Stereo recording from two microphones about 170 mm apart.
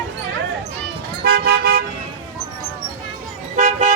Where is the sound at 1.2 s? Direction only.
65° right (ahead or behind).